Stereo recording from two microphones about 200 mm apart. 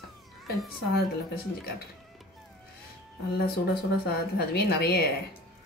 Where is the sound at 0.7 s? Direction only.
50° left (ahead or behind).